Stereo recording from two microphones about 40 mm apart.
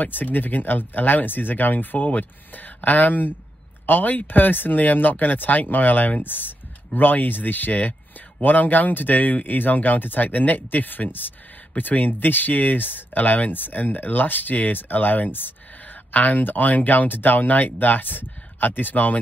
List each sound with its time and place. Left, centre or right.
0.0 s speech: left
11.7 s speech: left